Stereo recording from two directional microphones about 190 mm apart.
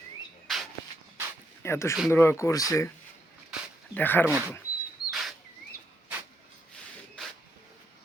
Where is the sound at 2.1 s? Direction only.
15° left (ahead or behind).